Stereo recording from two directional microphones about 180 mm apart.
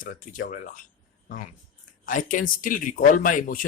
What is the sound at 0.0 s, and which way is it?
Speech, 50° left (ahead or behind).